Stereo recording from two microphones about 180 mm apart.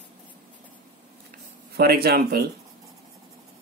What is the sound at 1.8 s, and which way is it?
Speech, 60° right (ahead or behind).